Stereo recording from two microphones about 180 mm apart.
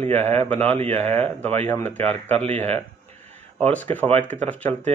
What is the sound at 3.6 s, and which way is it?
Speech, 10° left (ahead or behind).